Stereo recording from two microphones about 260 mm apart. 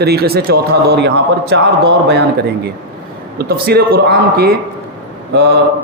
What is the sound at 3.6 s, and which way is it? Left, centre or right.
Speech, right.